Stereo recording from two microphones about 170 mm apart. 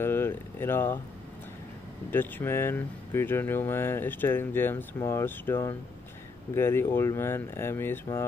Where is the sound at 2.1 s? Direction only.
10° left (ahead or behind).